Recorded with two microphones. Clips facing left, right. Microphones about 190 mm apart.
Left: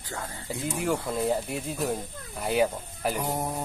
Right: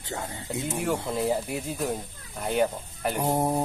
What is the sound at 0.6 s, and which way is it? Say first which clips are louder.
Speech: even; centre (ahead or behind).